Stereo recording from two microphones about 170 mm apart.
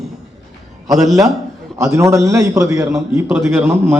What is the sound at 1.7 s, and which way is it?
A man's voice, 20° right (ahead or behind).